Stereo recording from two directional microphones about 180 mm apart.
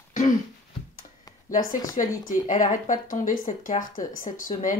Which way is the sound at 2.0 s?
35° left (ahead or behind).